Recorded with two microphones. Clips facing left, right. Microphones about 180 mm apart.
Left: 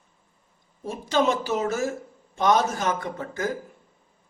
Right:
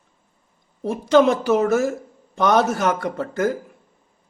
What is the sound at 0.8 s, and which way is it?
A woman's voice, 70° right (ahead or behind).